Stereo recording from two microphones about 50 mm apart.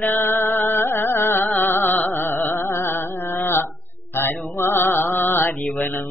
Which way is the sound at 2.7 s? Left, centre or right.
Left.